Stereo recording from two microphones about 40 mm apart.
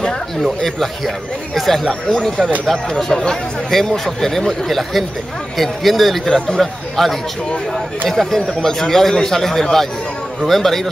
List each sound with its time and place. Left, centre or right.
0.4 s a man's voice: centre
6.2 s a man's voice: centre
6.6 s a man's voice: centre